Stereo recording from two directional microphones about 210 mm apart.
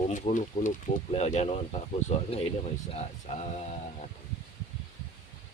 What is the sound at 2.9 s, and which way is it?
Speech, 30° left (ahead or behind).